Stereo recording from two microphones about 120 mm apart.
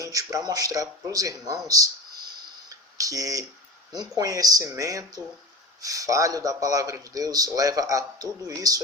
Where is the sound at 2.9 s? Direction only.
30° right (ahead or behind).